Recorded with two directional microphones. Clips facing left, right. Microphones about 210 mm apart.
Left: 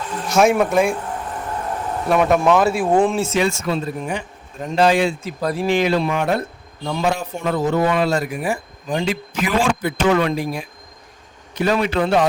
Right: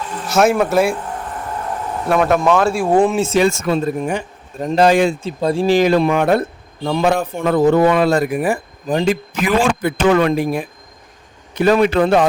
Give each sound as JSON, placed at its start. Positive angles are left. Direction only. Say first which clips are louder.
{"t": 0.3, "sound": "speech", "louder": "right 1 dB", "side_deg": 0}
{"t": 2.0, "sound": "speech", "louder": "right 1 dB", "side_deg": 0}
{"t": 3.3, "sound": "speech", "louder": "right 5 dB", "side_deg": -45}
{"t": 5.2, "sound": "a man's voice", "louder": "right 5 dB", "side_deg": -25}